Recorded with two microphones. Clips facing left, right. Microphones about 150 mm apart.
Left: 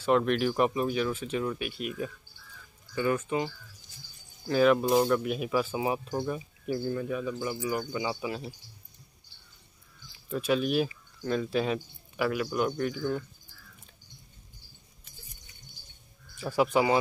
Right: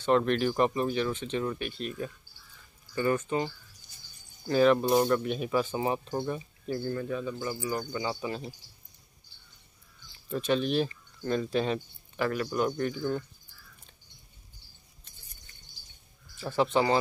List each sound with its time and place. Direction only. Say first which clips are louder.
0.0 s speech: even; 5° left (ahead or behind)
4.5 s speech: even; 5° left (ahead or behind)
10.2 s speech: even; 5° left (ahead or behind)
16.3 s speech: left 1 dB; 10° left (ahead or behind)